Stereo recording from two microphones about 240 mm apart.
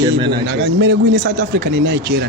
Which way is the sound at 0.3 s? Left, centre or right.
Right.